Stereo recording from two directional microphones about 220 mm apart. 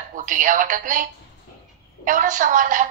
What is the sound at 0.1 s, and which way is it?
Speech, 35° right (ahead or behind).